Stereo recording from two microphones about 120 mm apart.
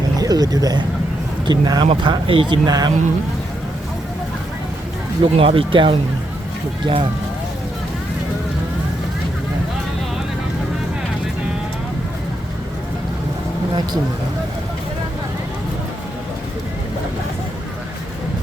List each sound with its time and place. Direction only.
0.2 s speech: 30° right (ahead or behind)
1.9 s speech: 45° right (ahead or behind)
2.6 s speech: 30° right (ahead or behind)
5.2 s speech: 50° right (ahead or behind)